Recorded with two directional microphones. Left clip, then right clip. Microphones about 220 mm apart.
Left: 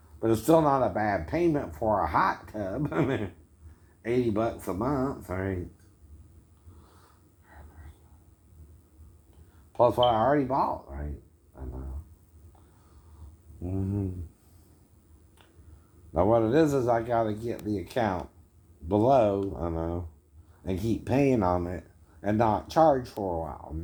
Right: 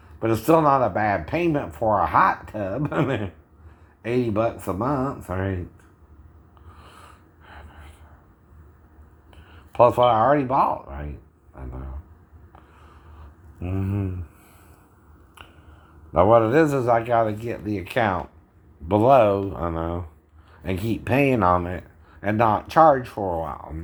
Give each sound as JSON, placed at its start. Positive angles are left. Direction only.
{"t": 0.2, "sound": "speech", "side_deg": -15}
{"t": 9.7, "sound": "a man's voice", "side_deg": -15}
{"t": 13.6, "sound": "speech", "side_deg": -10}
{"t": 16.1, "sound": "speech", "side_deg": -15}
{"t": 23.1, "sound": "speech", "side_deg": -15}